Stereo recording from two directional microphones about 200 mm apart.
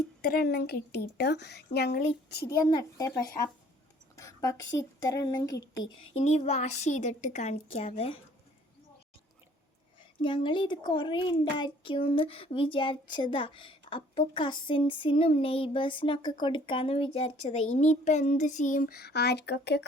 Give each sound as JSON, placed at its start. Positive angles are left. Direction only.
{"t": 0.2, "sound": "a woman's voice", "side_deg": 45}
{"t": 2.5, "sound": "a sound", "side_deg": 20}
{"t": 4.8, "sound": "a woman's voice", "side_deg": 15}
{"t": 6.1, "sound": "a child's voice", "side_deg": 35}
{"t": 10.0, "sound": "a sound", "side_deg": 25}
{"t": 16.4, "sound": "a child's voice", "side_deg": 25}